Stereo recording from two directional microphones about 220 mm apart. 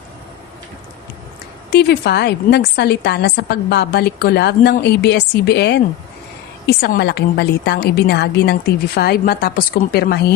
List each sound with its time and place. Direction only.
1.7 s a woman's voice: 45° left (ahead or behind)